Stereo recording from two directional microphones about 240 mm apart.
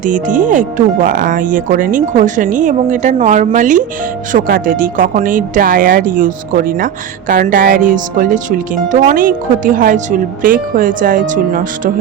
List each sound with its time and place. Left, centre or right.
0.0 s speech: right